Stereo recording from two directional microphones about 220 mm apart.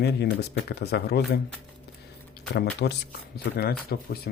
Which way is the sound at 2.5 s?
50° left (ahead or behind).